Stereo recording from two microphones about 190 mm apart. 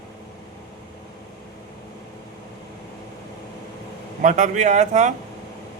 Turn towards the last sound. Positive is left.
turn(degrees=-40)  # may be behind; listen again after turning